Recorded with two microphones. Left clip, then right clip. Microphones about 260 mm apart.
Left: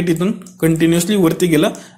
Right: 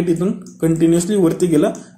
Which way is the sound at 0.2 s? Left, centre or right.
Left.